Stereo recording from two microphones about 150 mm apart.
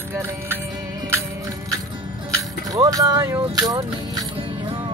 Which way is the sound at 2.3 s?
25° right (ahead or behind).